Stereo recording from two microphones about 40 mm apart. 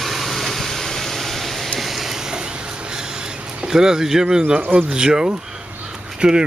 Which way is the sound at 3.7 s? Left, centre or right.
Centre.